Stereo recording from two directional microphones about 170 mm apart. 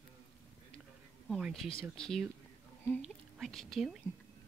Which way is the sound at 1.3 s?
Centre (ahead or behind).